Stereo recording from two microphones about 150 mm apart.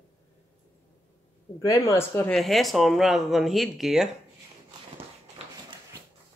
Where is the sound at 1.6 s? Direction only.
20° left (ahead or behind).